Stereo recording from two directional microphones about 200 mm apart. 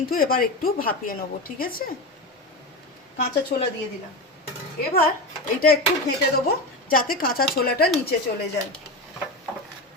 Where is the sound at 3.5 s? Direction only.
50° left (ahead or behind).